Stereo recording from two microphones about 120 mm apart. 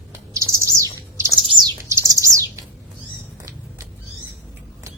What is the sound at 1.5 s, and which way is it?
Bird flight, 40° right (ahead or behind).